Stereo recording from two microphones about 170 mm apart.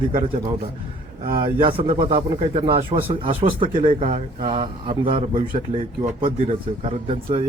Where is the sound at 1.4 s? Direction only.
30° right (ahead or behind).